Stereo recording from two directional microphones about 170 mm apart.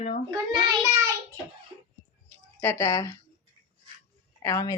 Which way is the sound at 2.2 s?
10° left (ahead or behind).